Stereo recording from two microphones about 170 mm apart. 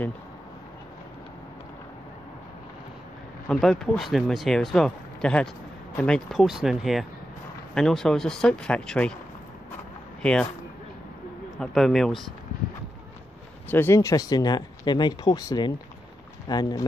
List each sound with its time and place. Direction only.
3.4 s speech: 5° left (ahead or behind)
11.6 s speech: centre (ahead or behind)
13.7 s speech: 10° left (ahead or behind)